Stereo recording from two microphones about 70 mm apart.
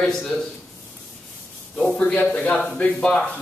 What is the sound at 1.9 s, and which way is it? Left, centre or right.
Speech, centre.